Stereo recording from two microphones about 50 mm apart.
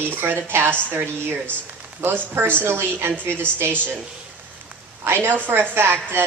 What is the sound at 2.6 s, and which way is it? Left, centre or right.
A woman's voice, right.